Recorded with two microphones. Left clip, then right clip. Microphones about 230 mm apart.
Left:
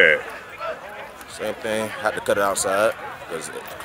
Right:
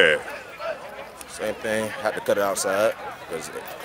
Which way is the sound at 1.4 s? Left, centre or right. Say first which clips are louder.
Left 1 dB; centre.